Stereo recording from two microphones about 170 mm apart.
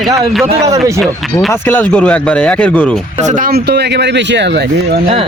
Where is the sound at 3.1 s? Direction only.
45° right (ahead or behind); by 4.6 s 90° right.